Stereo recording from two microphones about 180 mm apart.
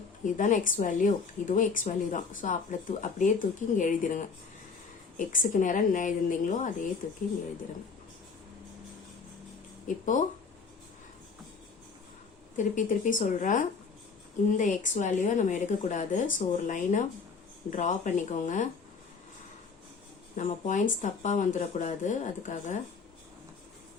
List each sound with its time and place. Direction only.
0.3 s a woman's voice: 45° left (ahead or behind)
9.8 s speech: 45° left (ahead or behind)
12.5 s a woman's voice: 45° left (ahead or behind)
20.3 s a woman's voice: 45° left (ahead or behind)